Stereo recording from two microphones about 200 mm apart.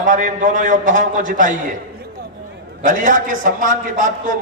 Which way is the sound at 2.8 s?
40° right (ahead or behind).